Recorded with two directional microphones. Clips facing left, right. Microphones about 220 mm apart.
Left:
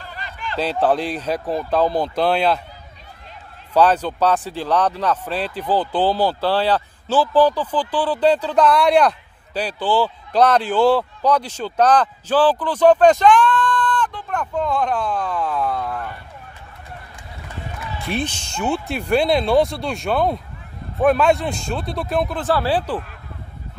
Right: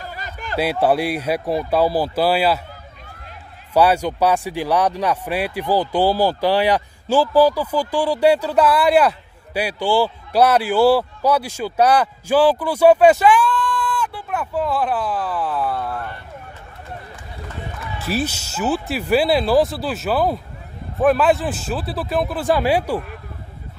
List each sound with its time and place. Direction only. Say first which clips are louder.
0.0 s a sound: right 1 dB; 45° right (ahead or behind)
0.6 s speech: right 1 dB; 10° right (ahead or behind)
3.7 s speech: even; 10° right (ahead or behind)
17.9 s speech: right 2 dB; 5° right (ahead or behind)